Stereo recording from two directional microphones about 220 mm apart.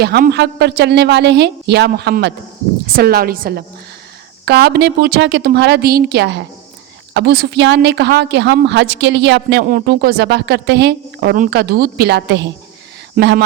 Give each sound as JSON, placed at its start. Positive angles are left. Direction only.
{"t": 0.0, "sound": "speech", "side_deg": -50}